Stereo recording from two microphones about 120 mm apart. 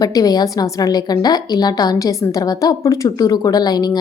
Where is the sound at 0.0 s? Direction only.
30° left (ahead or behind).